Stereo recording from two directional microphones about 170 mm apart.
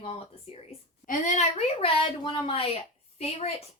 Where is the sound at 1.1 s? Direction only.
45° left (ahead or behind).